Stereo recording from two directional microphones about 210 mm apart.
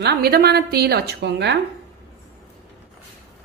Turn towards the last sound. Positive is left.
turn(degrees=-55)  # may be behind; listen again after turning